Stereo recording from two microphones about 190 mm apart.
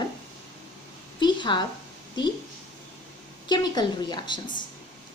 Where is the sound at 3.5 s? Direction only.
20° left (ahead or behind).